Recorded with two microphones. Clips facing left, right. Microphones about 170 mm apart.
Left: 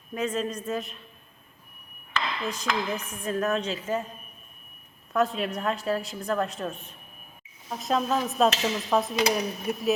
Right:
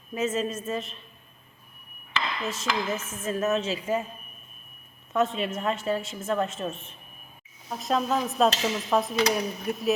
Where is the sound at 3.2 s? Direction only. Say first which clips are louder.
Right 1 dB; 5° right (ahead or behind).